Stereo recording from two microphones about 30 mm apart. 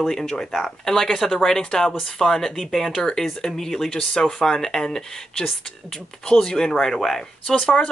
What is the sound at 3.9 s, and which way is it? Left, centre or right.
Speech, left.